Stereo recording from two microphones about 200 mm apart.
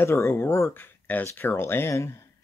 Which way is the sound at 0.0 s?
10° left (ahead or behind).